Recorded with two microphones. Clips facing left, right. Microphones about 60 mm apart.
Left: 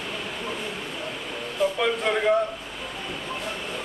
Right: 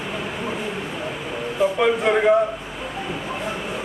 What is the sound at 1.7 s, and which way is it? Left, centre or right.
Speech, centre.